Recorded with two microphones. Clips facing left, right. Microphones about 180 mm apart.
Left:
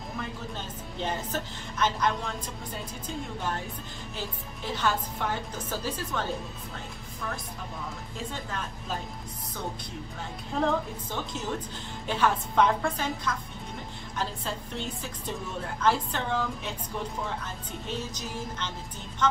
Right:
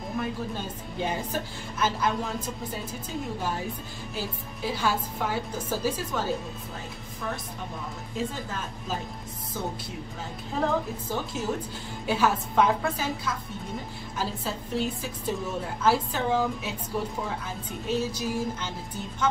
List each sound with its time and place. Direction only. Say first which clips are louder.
0.6 s a woman's voice: right 3 dB; 10° right (ahead or behind)
4.6 s a woman's voice: right 1 dB; 10° right (ahead or behind)
10.6 s a woman's voice: right 1 dB; 5° right (ahead or behind)
17.8 s a woman's voice: right 8 dB; 10° right (ahead or behind)